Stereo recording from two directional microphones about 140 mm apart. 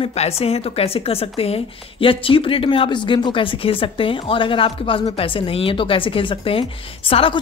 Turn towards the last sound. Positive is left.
turn(degrees=40)  # may be behind; listen again after turning